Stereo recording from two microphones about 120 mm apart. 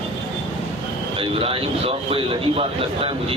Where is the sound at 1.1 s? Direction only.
50° right (ahead or behind).